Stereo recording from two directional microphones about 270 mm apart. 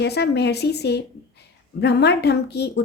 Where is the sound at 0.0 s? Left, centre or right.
Left.